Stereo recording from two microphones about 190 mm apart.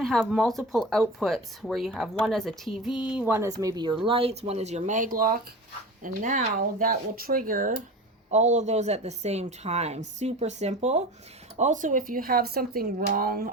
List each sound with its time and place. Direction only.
0.0 s a woman's voice: centre (ahead or behind); by 7.7 s 45° right (ahead or behind)
8.3 s a woman's voice: 35° right (ahead or behind)